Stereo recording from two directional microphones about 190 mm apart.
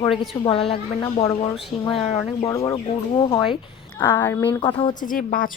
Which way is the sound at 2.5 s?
15° left (ahead or behind).